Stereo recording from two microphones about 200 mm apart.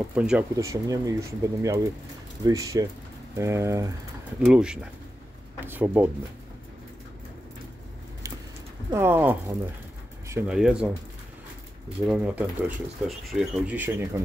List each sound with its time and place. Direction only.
0.1 s speech: 5° right (ahead or behind)
0.6 s speech: 15° right (ahead or behind)
4.5 s speech: 5° right (ahead or behind)
8.9 s speech: 10° right (ahead or behind)
10.2 s a sound: 15° right (ahead or behind)
10.5 s speech: 5° right (ahead or behind)
12.1 s speech: 5° right (ahead or behind)